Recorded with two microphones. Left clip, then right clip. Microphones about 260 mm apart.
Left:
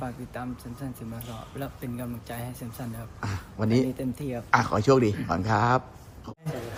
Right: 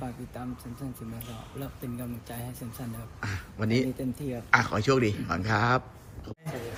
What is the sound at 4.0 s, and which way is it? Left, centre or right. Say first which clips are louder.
Speech: left 2 dB; centre.